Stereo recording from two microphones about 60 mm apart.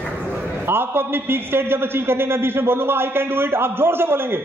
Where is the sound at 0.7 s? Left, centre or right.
Right.